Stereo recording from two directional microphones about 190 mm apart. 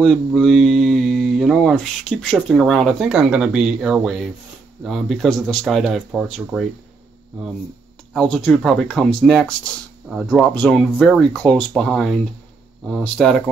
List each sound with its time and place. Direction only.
0.0 s speech: centre (ahead or behind)
8.1 s speech: centre (ahead or behind)